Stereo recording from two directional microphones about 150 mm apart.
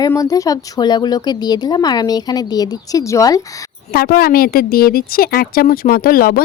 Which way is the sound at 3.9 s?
90° left.